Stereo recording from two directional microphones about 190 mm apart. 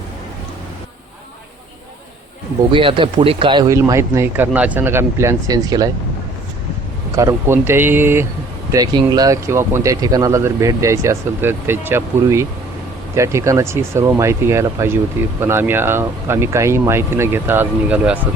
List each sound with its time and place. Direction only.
2.7 s speech: 25° right (ahead or behind)
7.2 s speech: 15° right (ahead or behind)